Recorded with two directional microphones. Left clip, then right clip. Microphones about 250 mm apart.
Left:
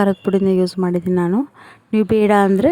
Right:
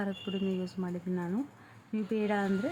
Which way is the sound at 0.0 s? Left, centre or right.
Left.